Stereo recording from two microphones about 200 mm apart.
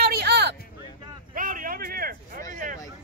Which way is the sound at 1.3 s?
45° right (ahead or behind).